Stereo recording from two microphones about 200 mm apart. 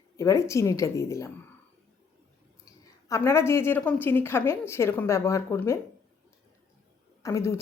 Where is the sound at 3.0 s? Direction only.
15° left (ahead or behind).